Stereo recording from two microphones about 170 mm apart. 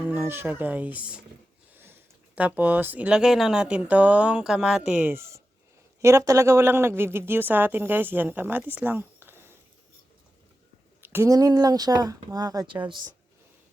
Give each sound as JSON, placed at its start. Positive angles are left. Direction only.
{"t": 0.1, "sound": "speech", "side_deg": -10}
{"t": 11.0, "sound": "speech", "side_deg": -15}